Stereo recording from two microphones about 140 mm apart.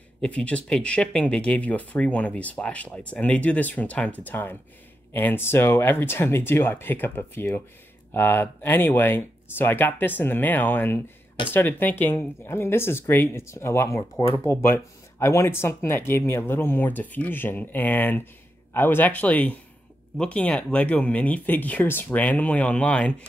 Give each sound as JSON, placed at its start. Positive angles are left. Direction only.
{"t": 0.2, "sound": "speech", "side_deg": 10}